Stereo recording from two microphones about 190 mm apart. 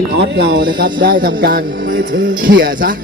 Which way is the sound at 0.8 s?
45° right (ahead or behind).